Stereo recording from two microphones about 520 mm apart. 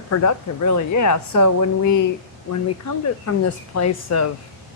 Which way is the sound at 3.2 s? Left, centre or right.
Left.